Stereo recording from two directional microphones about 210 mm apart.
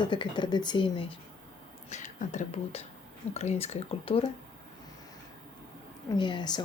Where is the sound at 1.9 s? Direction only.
35° left (ahead or behind).